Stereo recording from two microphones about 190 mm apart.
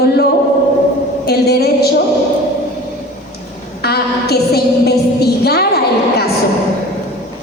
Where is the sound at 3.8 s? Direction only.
55° left (ahead or behind).